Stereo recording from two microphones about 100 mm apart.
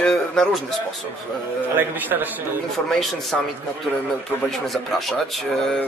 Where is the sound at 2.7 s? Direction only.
5° left (ahead or behind).